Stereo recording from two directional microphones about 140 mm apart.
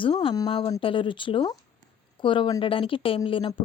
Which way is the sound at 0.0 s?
40° left (ahead or behind).